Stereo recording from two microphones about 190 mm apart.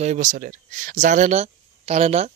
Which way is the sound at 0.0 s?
40° right (ahead or behind).